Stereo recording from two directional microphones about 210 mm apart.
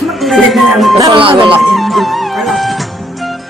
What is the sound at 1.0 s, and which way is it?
Speech, 20° right (ahead or behind).